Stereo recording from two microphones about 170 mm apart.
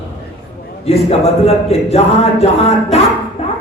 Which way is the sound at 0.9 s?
35° left (ahead or behind).